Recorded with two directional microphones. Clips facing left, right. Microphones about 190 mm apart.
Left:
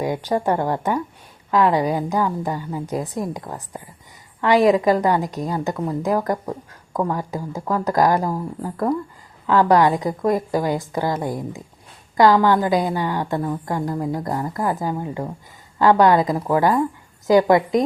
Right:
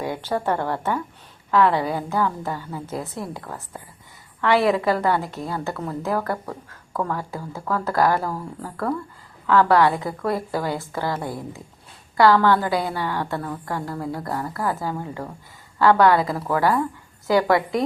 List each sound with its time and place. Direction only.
0.0 s a woman's voice: 15° left (ahead or behind)